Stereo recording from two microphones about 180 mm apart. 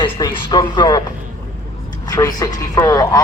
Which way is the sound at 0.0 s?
25° left (ahead or behind).